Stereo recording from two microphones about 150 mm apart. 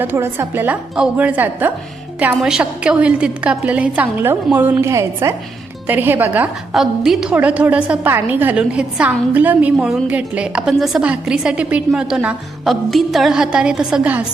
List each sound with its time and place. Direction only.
0.0 s a woman's voice: 15° right (ahead or behind)